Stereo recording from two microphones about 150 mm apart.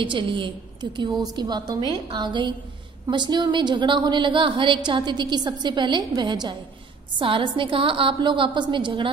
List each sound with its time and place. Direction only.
0.0 s a woman's voice: 35° right (ahead or behind)